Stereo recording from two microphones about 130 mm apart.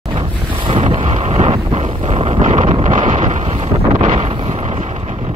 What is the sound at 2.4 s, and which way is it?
Vehicle, 70° right (ahead or behind).